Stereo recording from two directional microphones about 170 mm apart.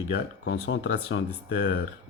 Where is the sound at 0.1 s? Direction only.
85° left.